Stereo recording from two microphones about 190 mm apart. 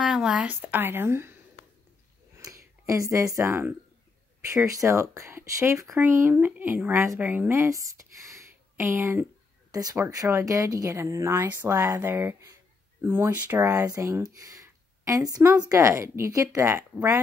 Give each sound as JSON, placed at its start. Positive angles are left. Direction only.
{"t": 0.0, "sound": "speech", "side_deg": -5}
{"t": 2.3, "sound": "a sound", "side_deg": -15}
{"t": 4.5, "sound": "speech", "side_deg": -15}